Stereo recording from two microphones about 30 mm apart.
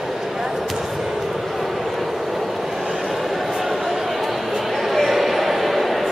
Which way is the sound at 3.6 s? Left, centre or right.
Centre.